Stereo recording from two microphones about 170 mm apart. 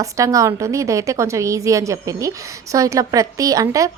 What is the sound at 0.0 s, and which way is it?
A woman's voice, 20° right (ahead or behind).